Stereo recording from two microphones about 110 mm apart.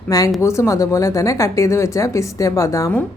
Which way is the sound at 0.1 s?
30° left (ahead or behind).